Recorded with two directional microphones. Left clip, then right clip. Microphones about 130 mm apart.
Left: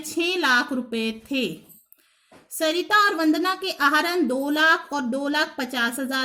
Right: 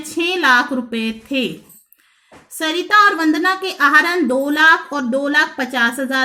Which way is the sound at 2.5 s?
35° left (ahead or behind).